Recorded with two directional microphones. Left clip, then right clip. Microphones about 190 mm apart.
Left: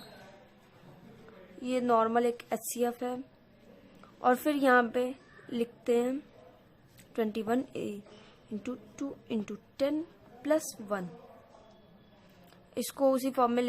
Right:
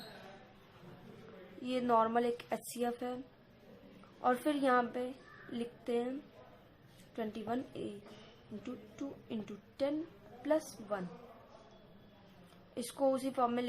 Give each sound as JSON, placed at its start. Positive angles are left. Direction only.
{"t": 1.6, "sound": "speech", "side_deg": 20}
{"t": 4.2, "sound": "a woman's voice", "side_deg": 25}
{"t": 7.2, "sound": "a woman's voice", "side_deg": 25}
{"t": 12.7, "sound": "speech", "side_deg": 25}